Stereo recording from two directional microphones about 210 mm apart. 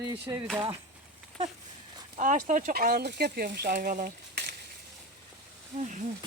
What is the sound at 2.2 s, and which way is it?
Speech, 35° right (ahead or behind).